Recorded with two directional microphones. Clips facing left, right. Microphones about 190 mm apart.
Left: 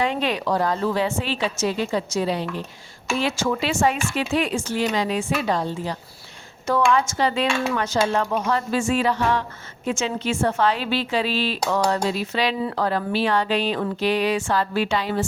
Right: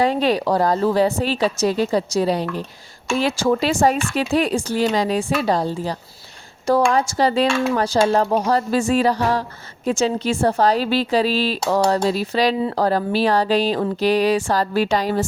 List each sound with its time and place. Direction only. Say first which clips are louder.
0.0 s a woman's voice: right 5 dB; 35° right (ahead or behind)